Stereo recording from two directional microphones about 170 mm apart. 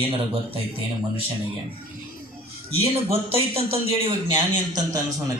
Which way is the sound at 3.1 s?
35° right (ahead or behind).